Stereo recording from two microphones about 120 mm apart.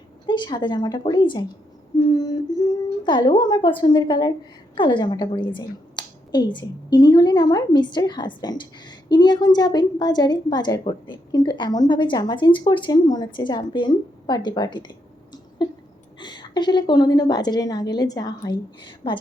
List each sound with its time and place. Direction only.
0.3 s speech: 40° left (ahead or behind)